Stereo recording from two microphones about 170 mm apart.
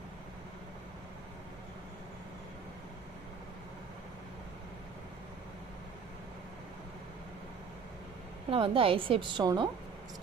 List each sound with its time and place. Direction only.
8.5 s a woman's voice: 30° right (ahead or behind)